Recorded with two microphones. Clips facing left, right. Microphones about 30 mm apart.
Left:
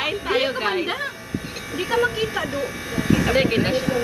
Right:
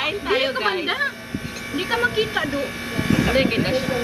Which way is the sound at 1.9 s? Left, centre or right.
Right.